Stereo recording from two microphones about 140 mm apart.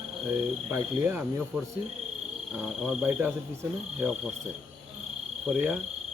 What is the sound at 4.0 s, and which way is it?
Cricket, 5° right (ahead or behind).